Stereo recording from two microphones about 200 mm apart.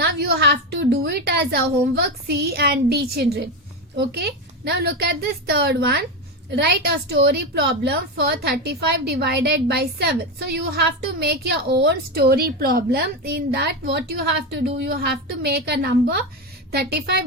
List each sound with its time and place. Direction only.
0.0 s a woman's voice: 55° right (ahead or behind)